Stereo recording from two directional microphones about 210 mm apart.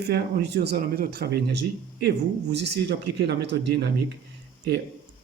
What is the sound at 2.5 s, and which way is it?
Speech, 55° right (ahead or behind).